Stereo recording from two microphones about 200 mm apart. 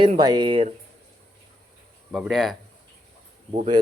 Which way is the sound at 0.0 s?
20° right (ahead or behind).